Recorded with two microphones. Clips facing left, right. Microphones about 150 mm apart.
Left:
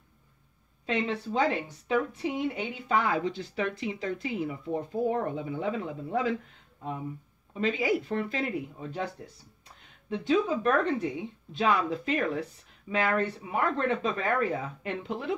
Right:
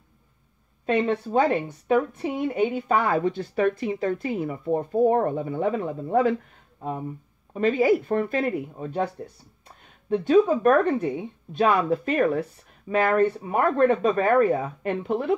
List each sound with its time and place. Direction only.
0.8 s a woman's voice: 50° right (ahead or behind)